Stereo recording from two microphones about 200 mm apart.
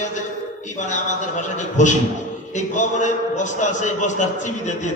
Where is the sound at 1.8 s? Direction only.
35° left (ahead or behind).